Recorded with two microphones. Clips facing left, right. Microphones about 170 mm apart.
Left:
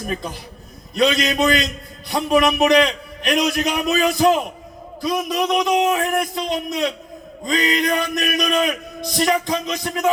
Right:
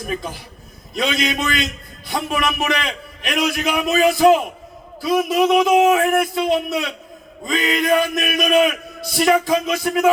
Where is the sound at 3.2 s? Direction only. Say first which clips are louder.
Left 2 dB; centre (ahead or behind).